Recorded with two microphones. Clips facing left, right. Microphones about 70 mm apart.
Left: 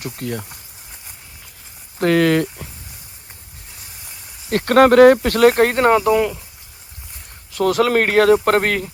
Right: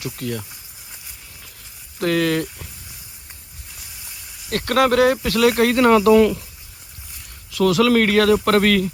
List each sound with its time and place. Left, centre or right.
0.0 s speech: left
2.0 s speech: left
4.4 s speech: left
6.1 s speech: centre
7.5 s speech: left